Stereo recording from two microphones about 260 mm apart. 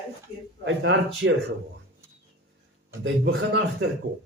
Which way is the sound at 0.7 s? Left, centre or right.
Right.